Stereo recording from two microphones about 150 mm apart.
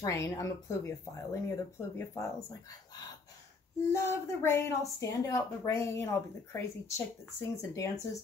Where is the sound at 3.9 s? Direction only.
15° left (ahead or behind).